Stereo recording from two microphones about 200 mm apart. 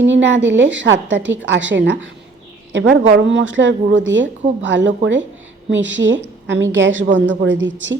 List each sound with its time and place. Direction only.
0.0 s a woman's voice: 65° right (ahead or behind)